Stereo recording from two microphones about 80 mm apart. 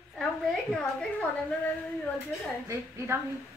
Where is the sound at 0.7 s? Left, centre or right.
Centre.